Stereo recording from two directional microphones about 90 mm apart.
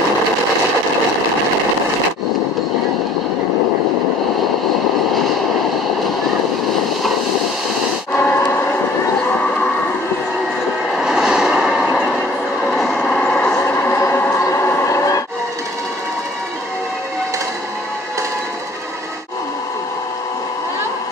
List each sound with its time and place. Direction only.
8.1 s vehicle: 25° left (ahead or behind)
11.0 s vehicle: 5° right (ahead or behind)
13.0 s vehicle: 10° left (ahead or behind)
13.8 s a sound: 25° left (ahead or behind)